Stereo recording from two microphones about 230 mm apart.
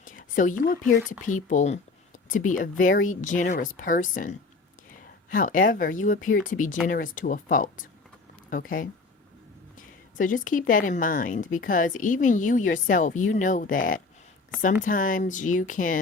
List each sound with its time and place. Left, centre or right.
0.0 s speech: left